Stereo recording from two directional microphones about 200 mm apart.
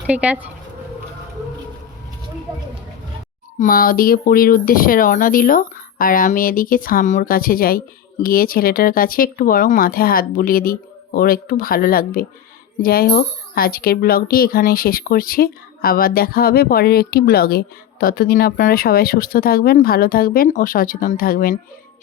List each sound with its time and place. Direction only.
0.1 s speech: 5° right (ahead or behind)
3.6 s speech: 45° left (ahead or behind)